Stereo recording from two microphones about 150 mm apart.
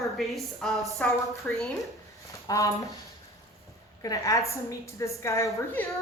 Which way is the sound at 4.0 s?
25° left (ahead or behind).